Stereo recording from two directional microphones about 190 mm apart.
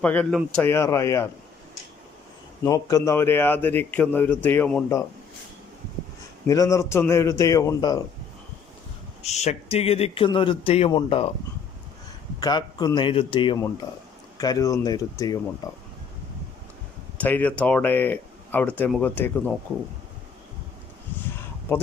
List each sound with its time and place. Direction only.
0.0 s a man's voice: 5° left (ahead or behind)
2.6 s a man's voice: 20° left (ahead or behind)
6.5 s a man's voice: 15° left (ahead or behind)
9.2 s speech: 35° left (ahead or behind)
12.4 s speech: 20° left (ahead or behind)
17.2 s a man's voice: 10° left (ahead or behind)
21.2 s a sound: 10° left (ahead or behind)